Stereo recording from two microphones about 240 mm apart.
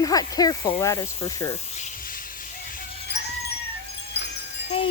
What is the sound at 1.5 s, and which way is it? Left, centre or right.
Music, left.